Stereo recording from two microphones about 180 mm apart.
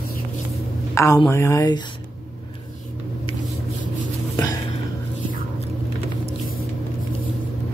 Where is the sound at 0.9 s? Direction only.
20° left (ahead or behind).